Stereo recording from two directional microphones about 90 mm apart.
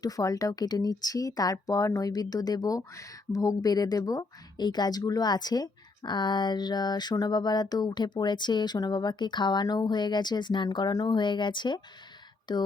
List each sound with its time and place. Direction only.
0.0 s speech: 40° left (ahead or behind)